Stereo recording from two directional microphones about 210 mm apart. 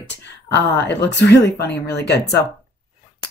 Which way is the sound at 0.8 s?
55° left (ahead or behind).